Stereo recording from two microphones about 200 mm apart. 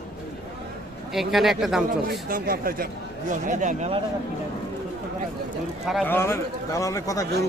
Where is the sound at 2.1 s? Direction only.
45° right (ahead or behind).